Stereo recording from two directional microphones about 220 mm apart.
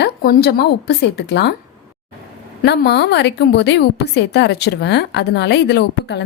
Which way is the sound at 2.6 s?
50° left (ahead or behind).